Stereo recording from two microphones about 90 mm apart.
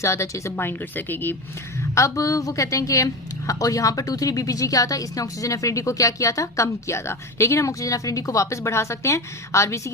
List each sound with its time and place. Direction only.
0.0 s speech: 35° left (ahead or behind)
2.0 s a woman's voice: 35° left (ahead or behind)